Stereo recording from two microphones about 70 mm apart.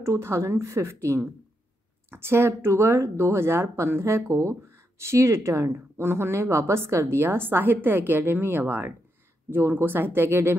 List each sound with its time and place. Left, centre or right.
0.0 s a woman's voice: right